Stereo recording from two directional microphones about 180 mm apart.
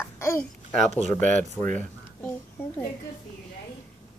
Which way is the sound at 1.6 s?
Centre (ahead or behind).